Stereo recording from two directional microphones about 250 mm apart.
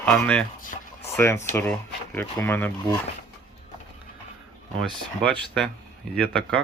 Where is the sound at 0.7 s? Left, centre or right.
Left.